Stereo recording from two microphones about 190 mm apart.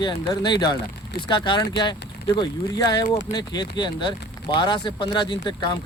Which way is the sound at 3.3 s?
20° left (ahead or behind).